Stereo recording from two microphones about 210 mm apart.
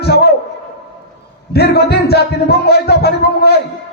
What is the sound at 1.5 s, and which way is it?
Music, 50° left (ahead or behind).